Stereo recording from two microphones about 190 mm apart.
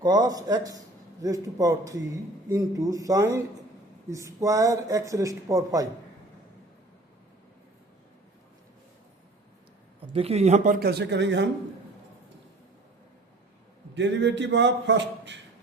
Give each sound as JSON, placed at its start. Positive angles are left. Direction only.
{"t": 0.0, "sound": "speech", "side_deg": -20}
{"t": 10.1, "sound": "speech", "side_deg": -30}
{"t": 13.9, "sound": "a man's voice", "side_deg": -70}